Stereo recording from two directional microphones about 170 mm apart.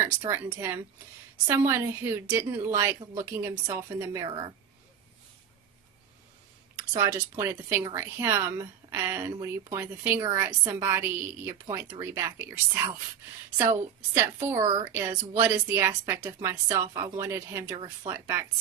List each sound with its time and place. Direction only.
0.0 s a woman's voice: 15° right (ahead or behind)
6.9 s a woman's voice: 15° right (ahead or behind)